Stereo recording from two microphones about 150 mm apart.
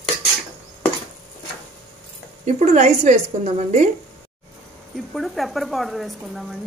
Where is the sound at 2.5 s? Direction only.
55° right (ahead or behind).